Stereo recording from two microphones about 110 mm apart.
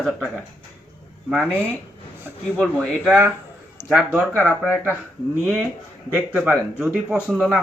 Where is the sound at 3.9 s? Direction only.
5° right (ahead or behind).